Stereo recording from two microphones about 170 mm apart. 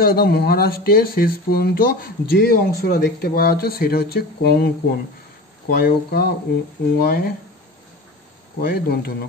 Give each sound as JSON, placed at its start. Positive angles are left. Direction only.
{"t": 0.0, "sound": "speech", "side_deg": 65}
{"t": 5.7, "sound": "speech", "side_deg": 65}
{"t": 8.5, "sound": "speech", "side_deg": 65}